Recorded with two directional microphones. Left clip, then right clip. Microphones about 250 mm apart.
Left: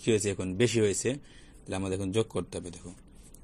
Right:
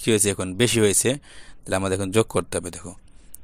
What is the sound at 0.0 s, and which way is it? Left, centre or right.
Speech, right.